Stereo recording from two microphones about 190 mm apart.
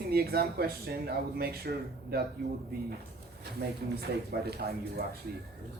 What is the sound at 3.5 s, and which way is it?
Speech, 55° right (ahead or behind).